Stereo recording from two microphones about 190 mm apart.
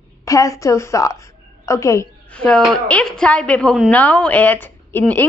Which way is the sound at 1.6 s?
15° left (ahead or behind).